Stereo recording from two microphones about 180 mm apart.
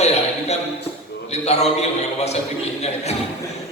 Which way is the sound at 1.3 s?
35° left (ahead or behind).